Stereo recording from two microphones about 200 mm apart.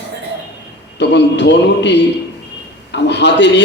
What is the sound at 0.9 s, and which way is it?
A man's voice, 60° left (ahead or behind).